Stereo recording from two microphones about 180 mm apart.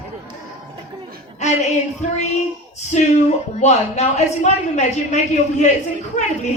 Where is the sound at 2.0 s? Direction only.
40° left (ahead or behind).